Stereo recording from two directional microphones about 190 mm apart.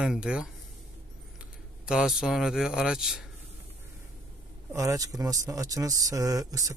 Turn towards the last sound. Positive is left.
turn(degrees=-20)  # may be behind; listen again after turning